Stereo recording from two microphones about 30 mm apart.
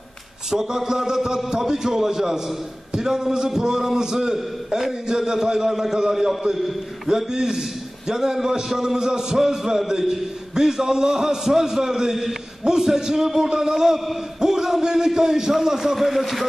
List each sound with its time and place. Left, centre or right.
0.5 s a man's voice: centre
4.6 s a man's voice: centre
5.0 s a man's voice: right; by 16.4 s centre